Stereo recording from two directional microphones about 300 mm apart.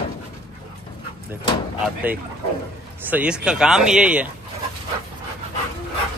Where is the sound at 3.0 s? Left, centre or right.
Centre.